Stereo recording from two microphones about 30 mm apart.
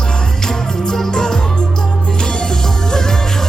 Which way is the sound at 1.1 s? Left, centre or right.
Centre.